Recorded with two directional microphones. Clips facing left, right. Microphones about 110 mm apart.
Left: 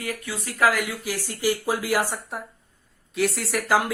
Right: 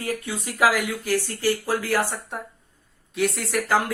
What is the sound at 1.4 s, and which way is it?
Speech, 15° left (ahead or behind).